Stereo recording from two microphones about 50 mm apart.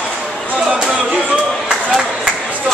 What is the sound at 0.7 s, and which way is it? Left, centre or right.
Music, centre.